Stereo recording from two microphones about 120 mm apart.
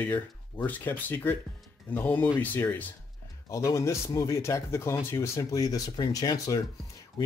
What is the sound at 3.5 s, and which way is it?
Speech, 25° left (ahead or behind).